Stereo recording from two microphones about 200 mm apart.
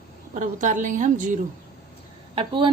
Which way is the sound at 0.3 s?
40° right (ahead or behind).